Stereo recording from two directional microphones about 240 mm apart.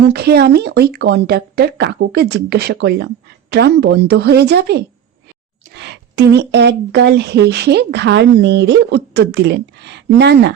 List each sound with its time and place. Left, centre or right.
0.0 s speech: right